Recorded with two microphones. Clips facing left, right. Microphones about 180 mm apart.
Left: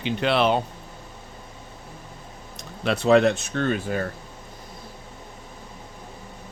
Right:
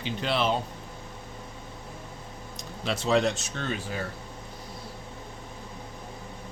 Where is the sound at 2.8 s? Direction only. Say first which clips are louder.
Left 7 dB; 60° left (ahead or behind).